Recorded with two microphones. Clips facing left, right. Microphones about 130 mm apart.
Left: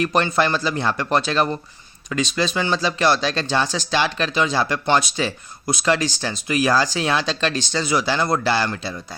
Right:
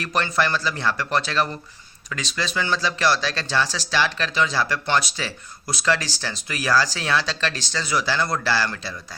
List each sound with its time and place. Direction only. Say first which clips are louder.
0.0 s speech: left 4 dB; 20° left (ahead or behind)